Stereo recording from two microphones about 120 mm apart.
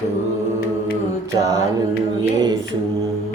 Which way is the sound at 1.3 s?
25° right (ahead or behind).